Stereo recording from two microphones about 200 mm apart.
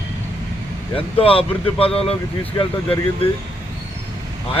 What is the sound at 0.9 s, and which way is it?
Speech, 25° left (ahead or behind).